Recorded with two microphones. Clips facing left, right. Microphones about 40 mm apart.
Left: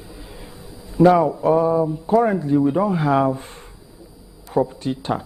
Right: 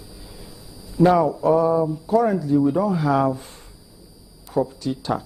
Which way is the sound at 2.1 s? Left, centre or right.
Left.